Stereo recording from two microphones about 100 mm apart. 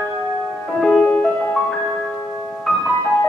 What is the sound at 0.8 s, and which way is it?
Music, 10° left (ahead or behind).